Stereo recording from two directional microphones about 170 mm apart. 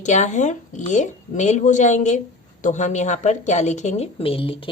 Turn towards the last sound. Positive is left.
turn(degrees=30)  # may be behind; listen again after turning